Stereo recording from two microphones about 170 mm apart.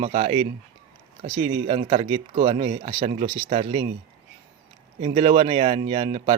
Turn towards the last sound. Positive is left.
turn(degrees=-35)  # may be behind; listen again after turning